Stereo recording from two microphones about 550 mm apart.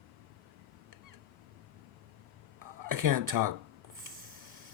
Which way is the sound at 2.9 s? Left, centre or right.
Right.